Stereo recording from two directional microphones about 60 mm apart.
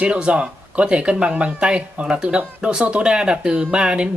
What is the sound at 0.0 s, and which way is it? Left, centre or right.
Speech, centre.